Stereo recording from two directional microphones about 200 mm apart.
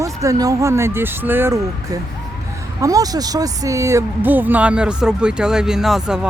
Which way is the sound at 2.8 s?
15° right (ahead or behind).